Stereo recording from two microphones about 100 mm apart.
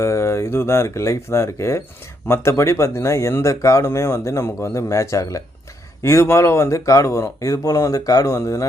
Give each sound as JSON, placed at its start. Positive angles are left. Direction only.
{"t": 0.0, "sound": "speech", "side_deg": 30}